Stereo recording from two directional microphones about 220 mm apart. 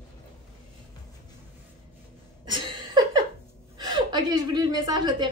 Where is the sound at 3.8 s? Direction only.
20° right (ahead or behind).